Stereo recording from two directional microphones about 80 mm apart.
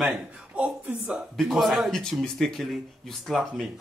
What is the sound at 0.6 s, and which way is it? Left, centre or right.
Speech, centre.